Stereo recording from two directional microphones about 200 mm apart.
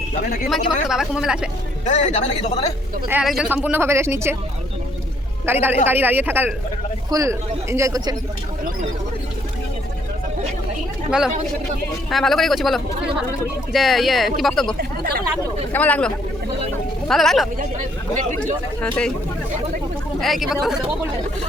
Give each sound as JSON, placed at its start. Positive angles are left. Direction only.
{"t": 0.5, "sound": "speech", "side_deg": 0}
{"t": 1.8, "sound": "speech", "side_deg": 35}
{"t": 3.1, "sound": "a woman's voice", "side_deg": -5}
{"t": 5.5, "sound": "a woman's voice", "side_deg": -10}
{"t": 12.1, "sound": "speech", "side_deg": 0}
{"t": 14.8, "sound": "chatter", "side_deg": -50}
{"t": 15.7, "sound": "speech", "side_deg": 5}
{"t": 18.8, "sound": "speech", "side_deg": 5}
{"t": 20.2, "sound": "speech", "side_deg": 0}